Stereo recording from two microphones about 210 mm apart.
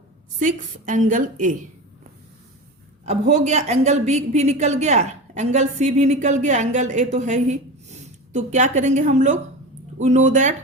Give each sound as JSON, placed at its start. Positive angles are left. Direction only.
{"t": 0.3, "sound": "speech", "side_deg": -35}
{"t": 3.1, "sound": "speech", "side_deg": -35}